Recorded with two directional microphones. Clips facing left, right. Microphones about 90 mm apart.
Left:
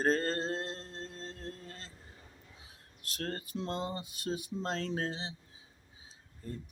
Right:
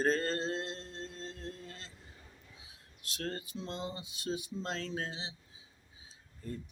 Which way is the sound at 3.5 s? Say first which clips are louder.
Left 5 dB; 65° left (ahead or behind).